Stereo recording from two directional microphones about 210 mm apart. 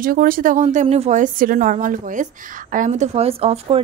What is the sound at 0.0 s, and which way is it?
Speech, 45° right (ahead or behind).